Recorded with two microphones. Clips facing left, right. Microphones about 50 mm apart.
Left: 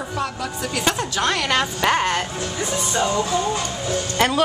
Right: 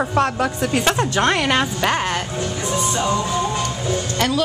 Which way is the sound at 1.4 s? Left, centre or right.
Centre.